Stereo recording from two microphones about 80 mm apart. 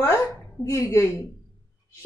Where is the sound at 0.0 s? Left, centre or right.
Left.